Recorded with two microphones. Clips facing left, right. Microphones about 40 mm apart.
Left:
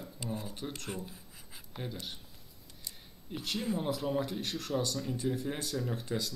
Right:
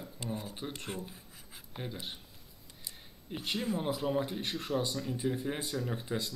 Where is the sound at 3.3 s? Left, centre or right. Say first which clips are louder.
Right 1 dB; centre.